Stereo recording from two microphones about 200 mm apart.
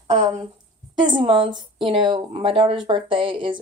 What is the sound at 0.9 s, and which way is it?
A woman's voice, 25° right (ahead or behind).